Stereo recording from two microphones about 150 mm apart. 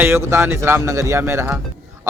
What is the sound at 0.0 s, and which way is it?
A man's voice, 15° right (ahead or behind).